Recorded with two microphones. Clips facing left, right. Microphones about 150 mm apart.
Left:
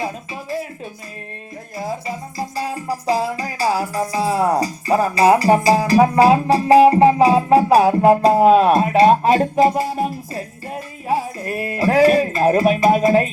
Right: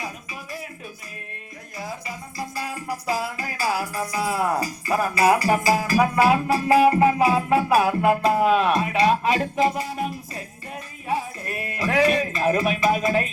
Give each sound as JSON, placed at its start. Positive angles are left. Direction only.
{"t": 1.8, "sound": "speech", "side_deg": 25}